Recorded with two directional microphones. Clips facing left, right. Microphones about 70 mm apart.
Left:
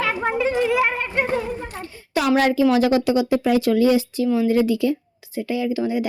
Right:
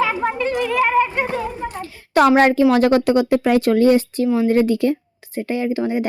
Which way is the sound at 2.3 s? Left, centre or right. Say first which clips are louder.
Right 3 dB; right.